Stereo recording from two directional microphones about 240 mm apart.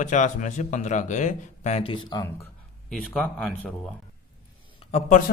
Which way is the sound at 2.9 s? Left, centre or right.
Centre.